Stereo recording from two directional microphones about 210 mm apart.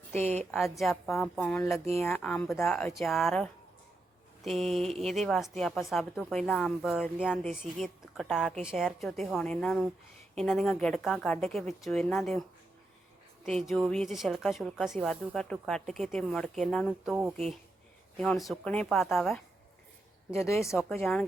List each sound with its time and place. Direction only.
0.5 s a woman's voice: centre (ahead or behind)
13.4 s a woman's voice: centre (ahead or behind)
18.2 s a woman's voice: centre (ahead or behind)
20.3 s a woman's voice: 15° left (ahead or behind)